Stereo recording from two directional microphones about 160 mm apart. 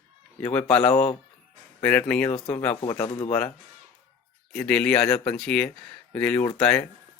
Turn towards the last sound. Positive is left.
turn(degrees=5)  # may be behind; listen again after turning